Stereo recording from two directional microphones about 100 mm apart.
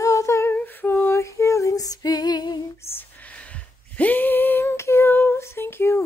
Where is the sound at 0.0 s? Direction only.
30° left (ahead or behind).